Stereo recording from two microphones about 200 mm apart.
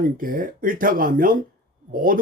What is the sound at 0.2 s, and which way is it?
Speech, 45° right (ahead or behind).